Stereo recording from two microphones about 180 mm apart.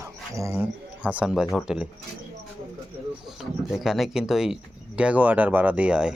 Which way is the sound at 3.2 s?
Centre (ahead or behind).